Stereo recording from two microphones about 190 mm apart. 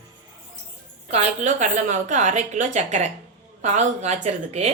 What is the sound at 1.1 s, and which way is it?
A woman's voice, 35° right (ahead or behind).